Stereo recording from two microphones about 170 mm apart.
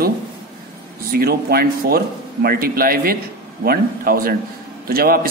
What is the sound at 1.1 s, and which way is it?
A man's voice, 60° right (ahead or behind).